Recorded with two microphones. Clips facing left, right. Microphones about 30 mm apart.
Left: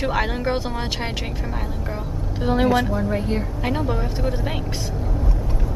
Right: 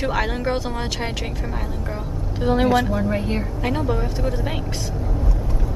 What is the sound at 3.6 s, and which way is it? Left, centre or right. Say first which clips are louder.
Speech: right 2 dB; centre.